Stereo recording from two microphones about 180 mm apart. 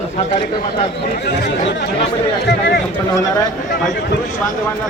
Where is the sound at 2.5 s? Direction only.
65° left (ahead or behind).